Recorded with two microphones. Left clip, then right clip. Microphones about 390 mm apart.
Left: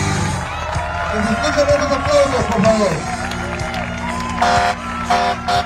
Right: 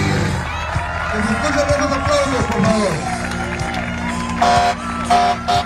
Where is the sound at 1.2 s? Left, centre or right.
Left.